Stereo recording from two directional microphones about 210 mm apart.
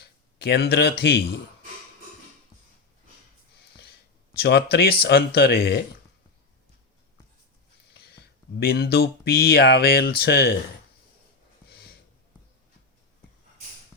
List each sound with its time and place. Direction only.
0.0 s speech: 50° left (ahead or behind)
4.4 s speech: 50° left (ahead or behind)
7.9 s speech: 50° left (ahead or behind)
11.7 s a sound: 45° left (ahead or behind)